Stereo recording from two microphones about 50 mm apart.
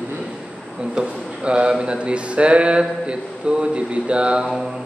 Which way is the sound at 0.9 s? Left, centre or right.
Right.